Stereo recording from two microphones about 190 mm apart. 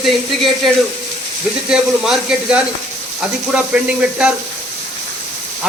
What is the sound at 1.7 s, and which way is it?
Speech, 5° right (ahead or behind).